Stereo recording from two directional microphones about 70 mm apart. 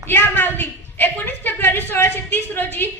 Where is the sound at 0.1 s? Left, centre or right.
Left.